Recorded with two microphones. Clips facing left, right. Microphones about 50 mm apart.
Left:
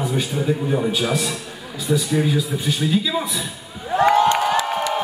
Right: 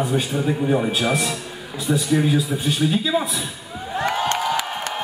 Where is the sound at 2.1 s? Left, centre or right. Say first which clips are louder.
Right 1 dB; centre.